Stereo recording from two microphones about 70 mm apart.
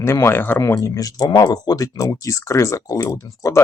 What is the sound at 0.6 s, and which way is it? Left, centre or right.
Speech, left.